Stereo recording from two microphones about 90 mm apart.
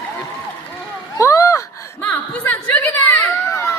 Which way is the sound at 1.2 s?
35° left (ahead or behind).